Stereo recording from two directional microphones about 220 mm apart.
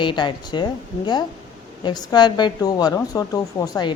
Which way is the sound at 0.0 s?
20° left (ahead or behind).